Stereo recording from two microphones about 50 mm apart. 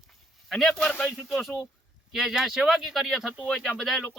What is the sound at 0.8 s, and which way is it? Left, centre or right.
Speech, centre.